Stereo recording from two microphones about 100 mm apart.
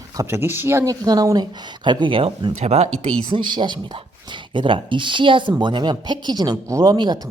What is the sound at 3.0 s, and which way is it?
Speech, 60° right (ahead or behind).